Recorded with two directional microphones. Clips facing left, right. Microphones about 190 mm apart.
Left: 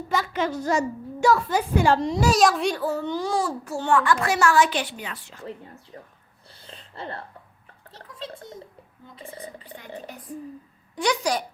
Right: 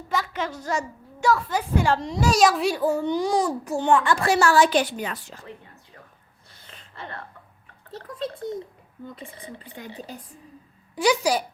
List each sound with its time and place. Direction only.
0.1 s a woman's voice: 5° left (ahead or behind)
2.3 s a child's voice: centre (ahead or behind); by 5.4 s 45° right (ahead or behind)
6.5 s a sound: 30° left (ahead or behind)
10.9 s a child's voice: 5° right (ahead or behind)